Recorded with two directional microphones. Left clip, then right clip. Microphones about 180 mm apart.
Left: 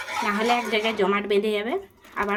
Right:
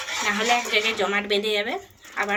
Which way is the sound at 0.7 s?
60° left (ahead or behind).